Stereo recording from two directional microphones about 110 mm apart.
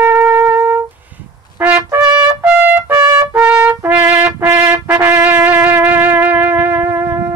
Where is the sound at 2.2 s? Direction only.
15° right (ahead or behind).